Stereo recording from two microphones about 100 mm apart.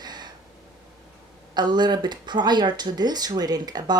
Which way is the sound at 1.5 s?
45° right (ahead or behind).